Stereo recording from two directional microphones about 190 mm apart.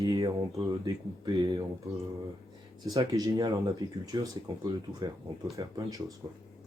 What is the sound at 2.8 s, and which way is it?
Speech, 20° right (ahead or behind).